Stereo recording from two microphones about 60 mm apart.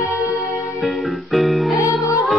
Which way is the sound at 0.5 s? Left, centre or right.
Centre.